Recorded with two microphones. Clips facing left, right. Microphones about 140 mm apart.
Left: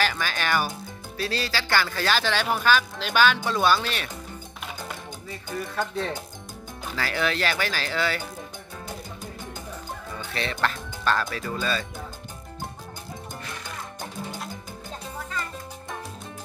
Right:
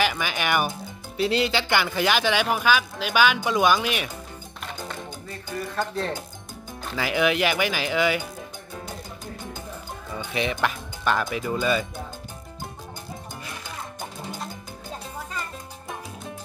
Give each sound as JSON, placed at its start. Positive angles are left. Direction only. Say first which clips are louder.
{"t": 0.0, "sound": "speech", "louder": "right 2 dB", "side_deg": -15}
{"t": 5.8, "sound": "speech", "louder": "right 1 dB", "side_deg": 0}
{"t": 7.0, "sound": "speech", "louder": "right 4 dB", "side_deg": -15}
{"t": 10.1, "sound": "speech", "louder": "right 5 dB", "side_deg": -15}